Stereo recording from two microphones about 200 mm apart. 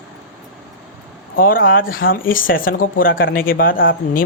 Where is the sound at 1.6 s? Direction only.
45° left (ahead or behind).